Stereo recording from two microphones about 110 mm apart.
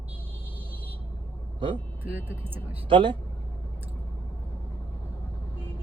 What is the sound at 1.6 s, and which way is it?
Speech, 50° right (ahead or behind).